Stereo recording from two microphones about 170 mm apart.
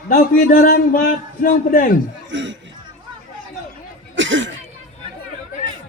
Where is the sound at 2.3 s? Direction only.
90° right.